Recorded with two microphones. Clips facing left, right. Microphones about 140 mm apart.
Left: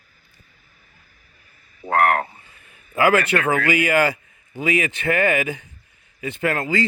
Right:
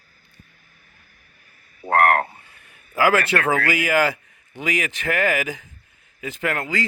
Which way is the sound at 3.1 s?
15° left (ahead or behind).